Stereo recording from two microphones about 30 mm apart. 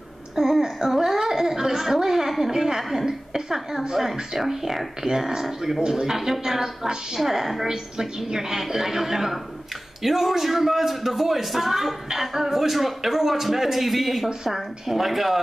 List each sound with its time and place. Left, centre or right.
0.4 s a sound: centre
2.5 s speech: centre
2.8 s a woman's voice: centre
3.1 s a man's voice: centre
7.6 s a man's voice: right; by 15.4 s centre